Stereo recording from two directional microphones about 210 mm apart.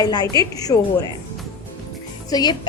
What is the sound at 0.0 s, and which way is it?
Speech, 20° left (ahead or behind).